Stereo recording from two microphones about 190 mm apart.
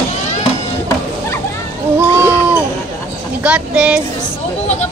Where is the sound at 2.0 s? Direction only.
10° right (ahead or behind).